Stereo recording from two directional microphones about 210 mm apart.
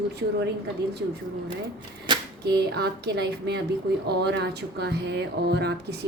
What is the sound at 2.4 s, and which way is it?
Speech, 50° right (ahead or behind).